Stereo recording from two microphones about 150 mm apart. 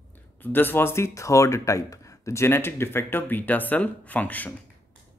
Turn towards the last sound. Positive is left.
turn(degrees=10)  # may be behind; listen again after turning